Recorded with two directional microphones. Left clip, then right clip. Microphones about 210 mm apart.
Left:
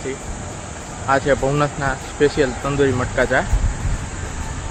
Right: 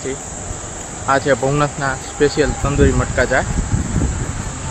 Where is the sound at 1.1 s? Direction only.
15° right (ahead or behind).